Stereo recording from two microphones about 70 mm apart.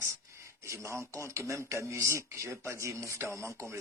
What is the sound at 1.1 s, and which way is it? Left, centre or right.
A man's voice, right.